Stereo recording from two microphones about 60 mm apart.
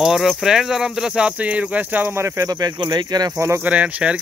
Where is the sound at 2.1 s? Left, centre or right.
Right.